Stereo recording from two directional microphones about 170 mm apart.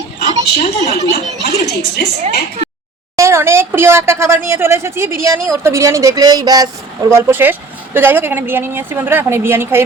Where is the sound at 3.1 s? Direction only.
15° right (ahead or behind).